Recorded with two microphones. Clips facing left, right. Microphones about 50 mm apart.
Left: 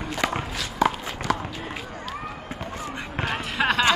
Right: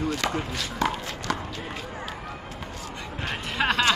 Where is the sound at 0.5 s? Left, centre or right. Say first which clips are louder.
Left 3 dB; centre.